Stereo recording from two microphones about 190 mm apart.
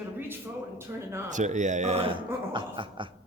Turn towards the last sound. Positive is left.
turn(degrees=-25)  # may be behind; listen again after turning